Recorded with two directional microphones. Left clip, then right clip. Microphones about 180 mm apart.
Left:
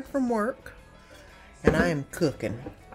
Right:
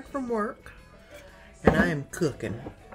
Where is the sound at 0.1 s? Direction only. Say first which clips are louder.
Left 2 dB; 30° left (ahead or behind).